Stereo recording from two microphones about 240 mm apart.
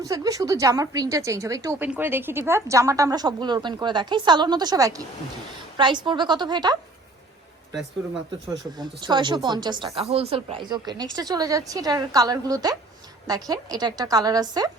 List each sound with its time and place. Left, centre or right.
0.0 s a woman's voice: centre
8.8 s a woman's voice: centre